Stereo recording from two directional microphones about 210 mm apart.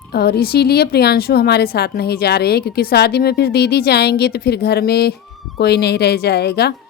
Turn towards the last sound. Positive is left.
turn(degrees=50)  # may be behind; listen again after turning